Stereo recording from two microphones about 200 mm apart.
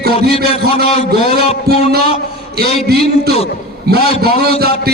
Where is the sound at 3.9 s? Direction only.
50° right (ahead or behind).